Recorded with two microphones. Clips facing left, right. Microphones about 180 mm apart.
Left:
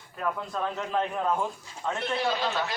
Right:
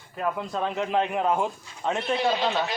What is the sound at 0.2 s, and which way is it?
A man's voice, 20° right (ahead or behind).